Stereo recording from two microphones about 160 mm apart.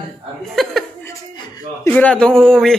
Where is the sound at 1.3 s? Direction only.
25° left (ahead or behind).